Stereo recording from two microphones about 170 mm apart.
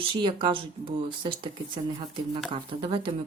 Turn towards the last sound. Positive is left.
turn(degrees=-30)  # may be behind; listen again after turning